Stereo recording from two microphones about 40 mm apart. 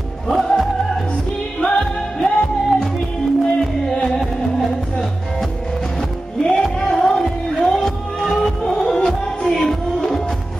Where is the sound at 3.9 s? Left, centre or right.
Left.